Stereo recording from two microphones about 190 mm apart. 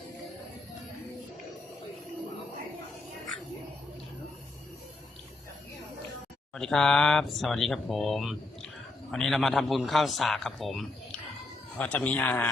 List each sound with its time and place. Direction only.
6.5 s a man's voice: 5° left (ahead or behind)